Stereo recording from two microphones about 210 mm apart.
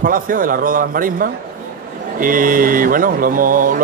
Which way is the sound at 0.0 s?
40° right (ahead or behind).